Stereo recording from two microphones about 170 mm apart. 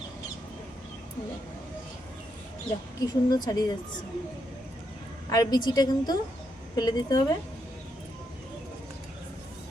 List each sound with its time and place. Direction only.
3.0 s a woman's voice: 20° left (ahead or behind)
5.3 s a woman's voice: 25° left (ahead or behind)